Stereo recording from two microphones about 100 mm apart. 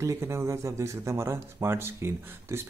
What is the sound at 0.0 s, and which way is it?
Speech, 30° right (ahead or behind).